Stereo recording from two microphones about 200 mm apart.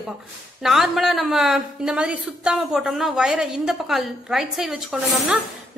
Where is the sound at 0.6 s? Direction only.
Centre (ahead or behind).